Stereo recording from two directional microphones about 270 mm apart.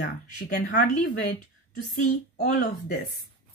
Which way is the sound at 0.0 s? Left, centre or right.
Left.